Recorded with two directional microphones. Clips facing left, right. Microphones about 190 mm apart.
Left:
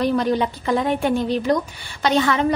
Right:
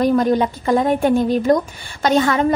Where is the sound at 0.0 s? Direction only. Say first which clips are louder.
Right 4 dB; 45° right (ahead or behind).